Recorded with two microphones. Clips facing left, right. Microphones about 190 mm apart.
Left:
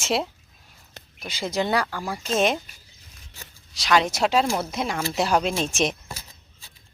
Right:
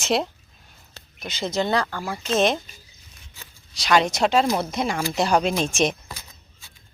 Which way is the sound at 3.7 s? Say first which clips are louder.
Right 1 dB; centre (ahead or behind).